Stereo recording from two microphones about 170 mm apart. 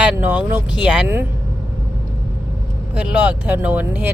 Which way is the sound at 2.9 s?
10° right (ahead or behind).